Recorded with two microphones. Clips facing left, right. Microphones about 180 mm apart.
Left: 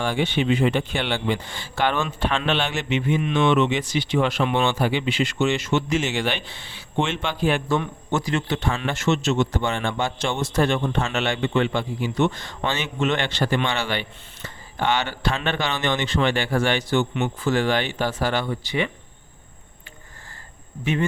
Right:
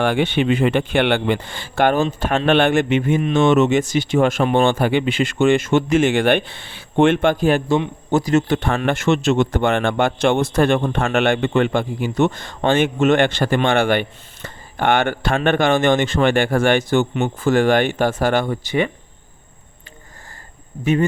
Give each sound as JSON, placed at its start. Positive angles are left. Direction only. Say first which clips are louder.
{"t": 0.0, "sound": "speech", "louder": "right 5 dB", "side_deg": -60}
{"t": 2.0, "sound": "speech", "louder": "right 5 dB", "side_deg": -40}
{"t": 20.8, "sound": "speech", "louder": "right 6 dB", "side_deg": -40}